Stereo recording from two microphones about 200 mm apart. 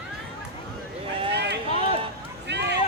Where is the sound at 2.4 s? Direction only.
60° right (ahead or behind).